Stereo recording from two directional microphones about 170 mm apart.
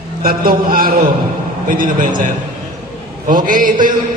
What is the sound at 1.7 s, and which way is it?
Music, 55° right (ahead or behind).